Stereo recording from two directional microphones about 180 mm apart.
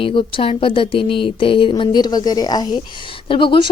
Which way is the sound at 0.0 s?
30° left (ahead or behind).